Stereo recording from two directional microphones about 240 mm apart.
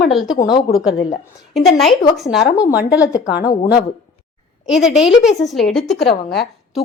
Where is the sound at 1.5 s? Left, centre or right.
Centre.